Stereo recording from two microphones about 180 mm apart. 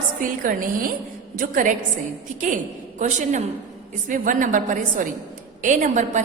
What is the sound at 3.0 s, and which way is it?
A woman's voice, 40° right (ahead or behind).